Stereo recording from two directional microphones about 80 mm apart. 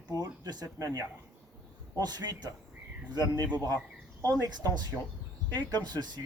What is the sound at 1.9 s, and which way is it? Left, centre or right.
Speech, right.